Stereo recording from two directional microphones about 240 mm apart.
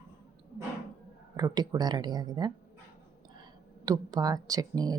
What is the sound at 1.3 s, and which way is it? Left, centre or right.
Speech, centre.